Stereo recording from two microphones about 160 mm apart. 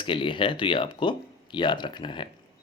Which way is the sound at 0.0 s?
30° left (ahead or behind).